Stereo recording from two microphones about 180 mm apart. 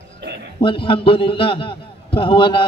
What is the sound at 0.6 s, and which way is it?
A man's voice, 30° left (ahead or behind).